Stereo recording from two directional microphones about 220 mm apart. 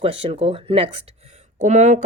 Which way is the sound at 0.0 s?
25° right (ahead or behind).